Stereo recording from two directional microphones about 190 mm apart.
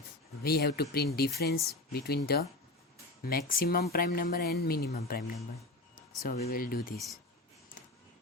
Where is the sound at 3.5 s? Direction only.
50° left (ahead or behind).